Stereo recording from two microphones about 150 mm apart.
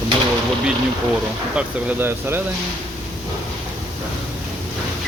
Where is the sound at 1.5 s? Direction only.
10° right (ahead or behind).